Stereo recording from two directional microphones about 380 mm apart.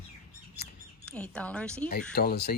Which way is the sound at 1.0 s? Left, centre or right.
Centre.